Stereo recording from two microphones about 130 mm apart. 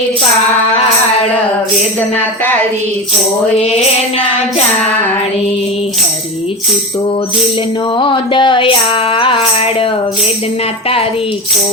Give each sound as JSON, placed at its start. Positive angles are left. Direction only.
{"t": 7.9, "sound": "music", "side_deg": 40}